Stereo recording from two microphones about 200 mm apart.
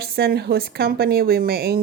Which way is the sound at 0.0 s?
50° right (ahead or behind).